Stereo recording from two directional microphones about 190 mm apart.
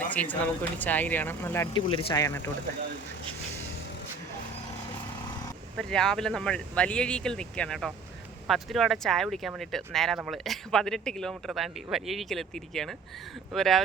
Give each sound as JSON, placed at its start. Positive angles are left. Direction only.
{"t": 0.1, "sound": "speech", "side_deg": 10}
{"t": 5.7, "sound": "speech", "side_deg": 5}